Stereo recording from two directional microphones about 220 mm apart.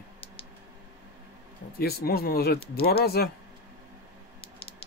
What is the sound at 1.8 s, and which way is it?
A man's voice, 45° left (ahead or behind).